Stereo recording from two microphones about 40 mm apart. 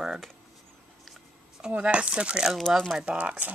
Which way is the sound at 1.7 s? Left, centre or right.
Right.